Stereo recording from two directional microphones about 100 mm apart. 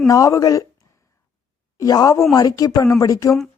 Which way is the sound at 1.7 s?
40° left (ahead or behind).